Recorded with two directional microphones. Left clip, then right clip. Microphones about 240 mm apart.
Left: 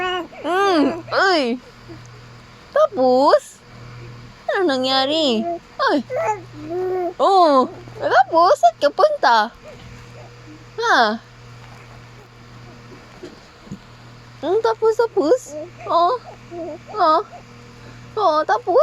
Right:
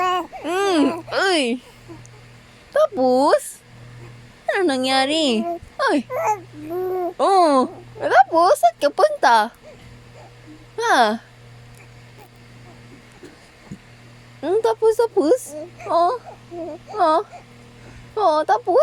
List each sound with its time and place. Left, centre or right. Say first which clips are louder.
0.0 s babbling: right 3 dB; centre
0.4 s babbling: left 3 dB; right
2.7 s speech: left 2 dB; right
4.4 s speech: left 1 dB; right
6.1 s speech: even; centre
7.2 s a child's voice: left 2 dB; right
10.8 s speech: left 1 dB; right
14.4 s a child's voice: even; right